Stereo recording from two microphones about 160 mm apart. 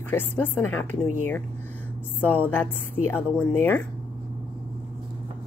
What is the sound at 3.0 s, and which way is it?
Speech, 15° left (ahead or behind).